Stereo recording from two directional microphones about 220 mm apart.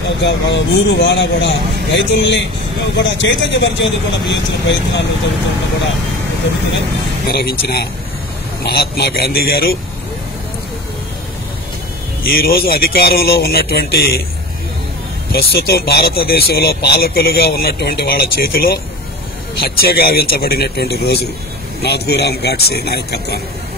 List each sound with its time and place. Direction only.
0.2 s speech: 50° left (ahead or behind)
7.2 s speech: 45° left (ahead or behind)
12.2 s speech: 45° left (ahead or behind)
15.3 s speech: 45° left (ahead or behind)
19.8 s speech: 45° left (ahead or behind)